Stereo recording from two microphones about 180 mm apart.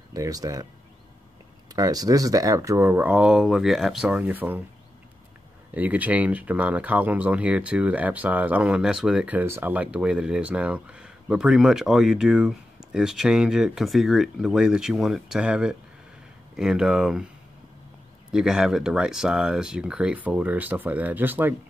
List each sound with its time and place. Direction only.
0.1 s speech: 20° right (ahead or behind)
1.8 s speech: 20° right (ahead or behind)
5.8 s speech: 10° right (ahead or behind)
18.3 s speech: 5° right (ahead or behind)